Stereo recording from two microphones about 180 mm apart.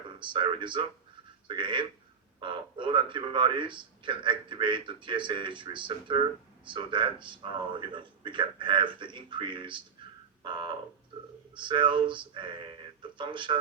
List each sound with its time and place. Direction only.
0.2 s a man's voice: 25° right (ahead or behind)